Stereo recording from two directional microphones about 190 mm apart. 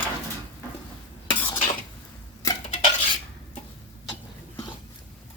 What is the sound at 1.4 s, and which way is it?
Dishes, 30° left (ahead or behind).